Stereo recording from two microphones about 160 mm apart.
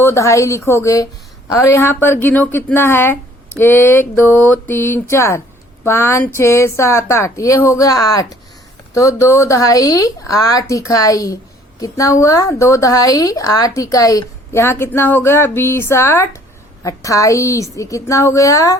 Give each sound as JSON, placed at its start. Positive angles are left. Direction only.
{"t": 0.0, "sound": "speech", "side_deg": 15}